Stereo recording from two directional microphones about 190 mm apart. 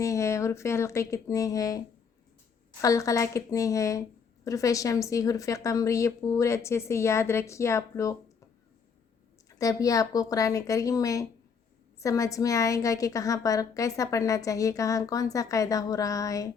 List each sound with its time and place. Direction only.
0.0 s a woman's voice: 15° left (ahead or behind)
2.8 s a woman's voice: 15° left (ahead or behind)
9.6 s a woman's voice: 15° left (ahead or behind)